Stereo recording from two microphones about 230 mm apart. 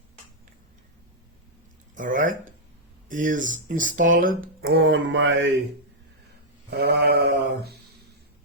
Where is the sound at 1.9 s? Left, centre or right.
Right.